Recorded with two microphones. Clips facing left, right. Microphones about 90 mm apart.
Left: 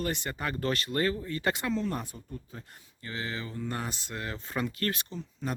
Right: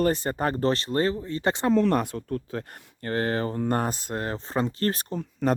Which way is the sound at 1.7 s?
75° right (ahead or behind).